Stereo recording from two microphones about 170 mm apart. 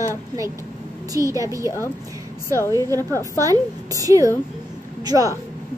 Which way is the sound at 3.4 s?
20° right (ahead or behind).